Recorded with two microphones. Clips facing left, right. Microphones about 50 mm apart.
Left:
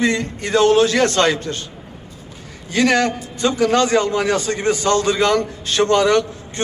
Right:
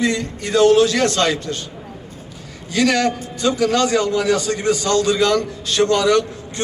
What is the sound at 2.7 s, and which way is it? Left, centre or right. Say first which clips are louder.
A man's voice: left 1 dB; left.